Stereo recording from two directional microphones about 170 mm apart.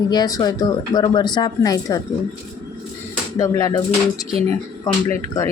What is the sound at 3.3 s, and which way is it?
Speech, 20° left (ahead or behind).